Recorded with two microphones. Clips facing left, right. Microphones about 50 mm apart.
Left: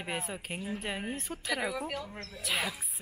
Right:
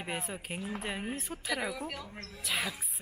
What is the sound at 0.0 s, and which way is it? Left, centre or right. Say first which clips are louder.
A woman's voice: left 1 dB; centre.